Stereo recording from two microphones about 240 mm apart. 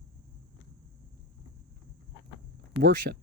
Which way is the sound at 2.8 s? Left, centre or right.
Right.